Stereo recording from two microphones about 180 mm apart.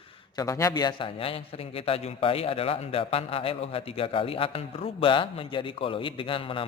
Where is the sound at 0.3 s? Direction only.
15° left (ahead or behind).